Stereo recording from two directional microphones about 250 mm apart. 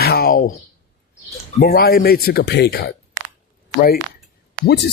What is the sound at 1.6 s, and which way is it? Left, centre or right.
Speech, left.